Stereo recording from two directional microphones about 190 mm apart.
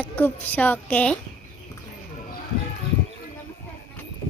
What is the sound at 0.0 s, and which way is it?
A woman's voice, 10° left (ahead or behind).